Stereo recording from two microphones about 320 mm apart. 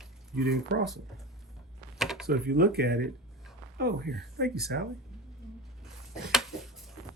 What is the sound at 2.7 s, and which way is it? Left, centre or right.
Speech, right.